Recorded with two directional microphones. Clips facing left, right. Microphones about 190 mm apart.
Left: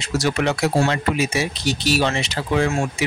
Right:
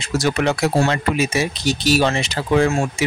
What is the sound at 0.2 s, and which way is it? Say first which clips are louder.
Speech: right 2 dB; 45° right (ahead or behind).